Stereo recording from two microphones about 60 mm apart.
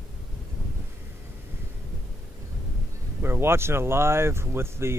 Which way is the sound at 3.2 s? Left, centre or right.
Right.